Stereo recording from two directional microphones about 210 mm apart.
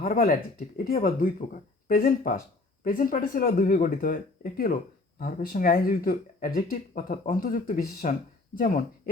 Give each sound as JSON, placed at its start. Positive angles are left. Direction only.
{"t": 0.0, "sound": "speech", "side_deg": 45}